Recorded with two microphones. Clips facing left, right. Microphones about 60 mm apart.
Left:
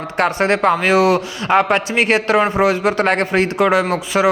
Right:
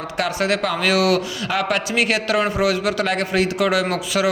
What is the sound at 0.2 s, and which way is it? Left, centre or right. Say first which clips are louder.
Speech: left 5 dB; left.